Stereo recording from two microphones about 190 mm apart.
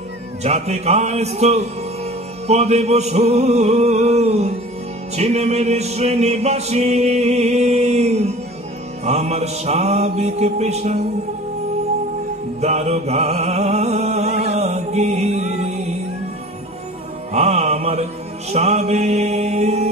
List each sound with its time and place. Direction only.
0.4 s music: 35° right (ahead or behind)
12.5 s mantra: 35° right (ahead or behind)
17.3 s music: 35° right (ahead or behind)
18.5 s mantra: 35° right (ahead or behind)